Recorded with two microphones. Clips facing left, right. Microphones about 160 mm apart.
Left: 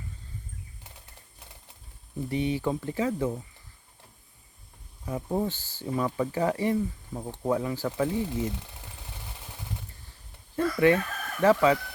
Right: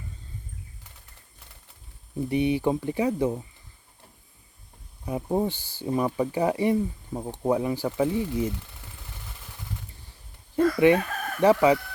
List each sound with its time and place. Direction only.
2.3 s speech: 15° right (ahead or behind)
5.0 s speech: 20° right (ahead or behind)
10.5 s speech: 15° right (ahead or behind)